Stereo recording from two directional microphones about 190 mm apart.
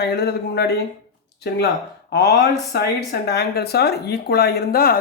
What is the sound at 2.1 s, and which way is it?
Speech, 60° left (ahead or behind).